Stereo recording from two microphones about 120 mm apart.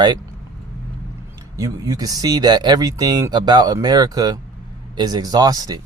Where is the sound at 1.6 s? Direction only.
30° right (ahead or behind).